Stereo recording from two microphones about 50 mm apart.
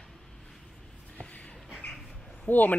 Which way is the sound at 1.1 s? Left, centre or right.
Left.